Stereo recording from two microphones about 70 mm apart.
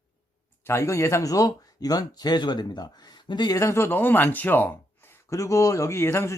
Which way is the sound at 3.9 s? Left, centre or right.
Left.